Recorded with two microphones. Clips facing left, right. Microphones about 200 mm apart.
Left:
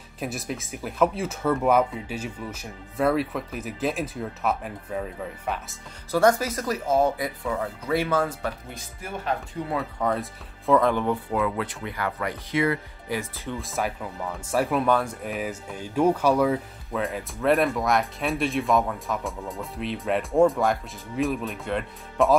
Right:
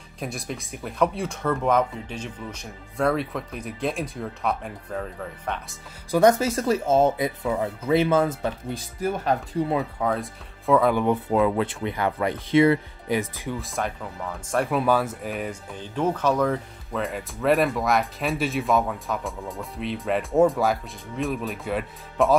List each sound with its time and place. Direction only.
0.2 s speech: centre (ahead or behind)
6.1 s speech: 20° right (ahead or behind)
9.9 s speech: centre (ahead or behind)
11.2 s speech: 25° right (ahead or behind)
13.5 s speech: centre (ahead or behind)